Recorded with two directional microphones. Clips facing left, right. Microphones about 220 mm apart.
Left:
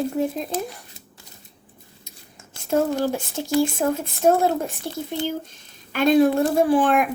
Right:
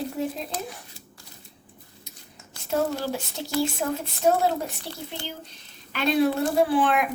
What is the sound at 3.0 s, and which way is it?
Speech, 50° left (ahead or behind).